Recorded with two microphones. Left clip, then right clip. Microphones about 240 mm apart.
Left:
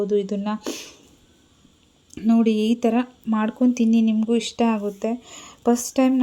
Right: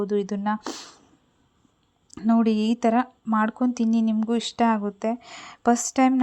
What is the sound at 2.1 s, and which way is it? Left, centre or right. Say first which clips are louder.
Speech: left 2 dB; centre.